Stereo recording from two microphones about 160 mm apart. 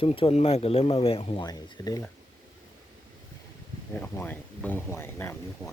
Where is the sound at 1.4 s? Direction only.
25° left (ahead or behind).